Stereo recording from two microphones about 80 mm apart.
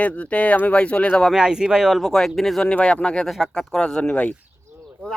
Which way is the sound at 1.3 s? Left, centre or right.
Centre.